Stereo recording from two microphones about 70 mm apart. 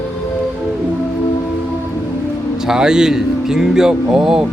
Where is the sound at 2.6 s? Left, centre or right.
Centre.